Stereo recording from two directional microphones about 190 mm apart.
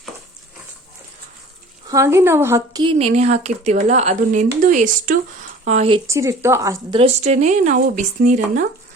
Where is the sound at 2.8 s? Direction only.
30° right (ahead or behind).